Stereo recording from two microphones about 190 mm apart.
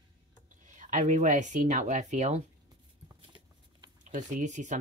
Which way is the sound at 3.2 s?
25° right (ahead or behind).